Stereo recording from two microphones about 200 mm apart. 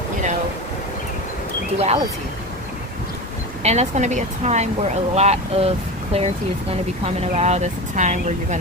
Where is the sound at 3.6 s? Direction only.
35° right (ahead or behind).